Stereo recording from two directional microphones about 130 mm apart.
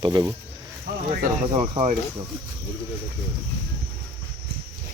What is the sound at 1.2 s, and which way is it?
Speech, 55° right (ahead or behind).